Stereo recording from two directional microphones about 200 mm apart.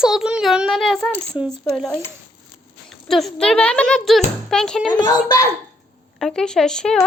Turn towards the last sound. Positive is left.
turn(degrees=5)  # may be behind; listen again after turning